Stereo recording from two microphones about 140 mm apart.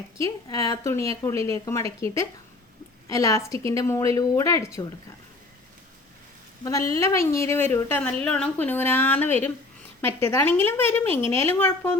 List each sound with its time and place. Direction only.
0.2 s a woman's voice: 20° left (ahead or behind)
6.7 s a woman's voice: 20° left (ahead or behind)